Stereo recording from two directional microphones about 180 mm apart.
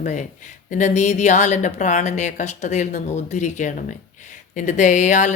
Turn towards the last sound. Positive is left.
turn(degrees=40)  # may be behind; listen again after turning